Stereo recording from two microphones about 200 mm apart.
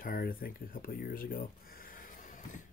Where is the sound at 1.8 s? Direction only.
45° left (ahead or behind).